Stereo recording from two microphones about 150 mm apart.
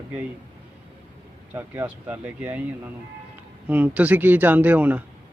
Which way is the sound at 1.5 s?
15° right (ahead or behind).